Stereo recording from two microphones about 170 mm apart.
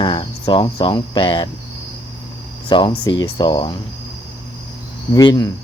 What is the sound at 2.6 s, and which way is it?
Speech, 25° left (ahead or behind).